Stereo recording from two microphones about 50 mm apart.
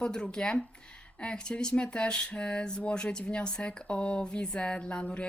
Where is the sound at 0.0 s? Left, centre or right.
Centre.